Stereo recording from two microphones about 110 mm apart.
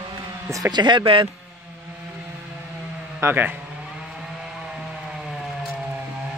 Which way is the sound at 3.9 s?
5° right (ahead or behind).